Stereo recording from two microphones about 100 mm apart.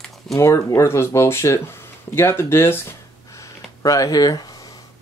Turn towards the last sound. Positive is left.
turn(degrees=40)  # may be behind; listen again after turning